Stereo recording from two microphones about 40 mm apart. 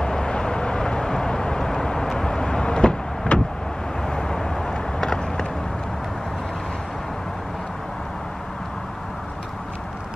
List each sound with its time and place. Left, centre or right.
0.0 s vehicle: left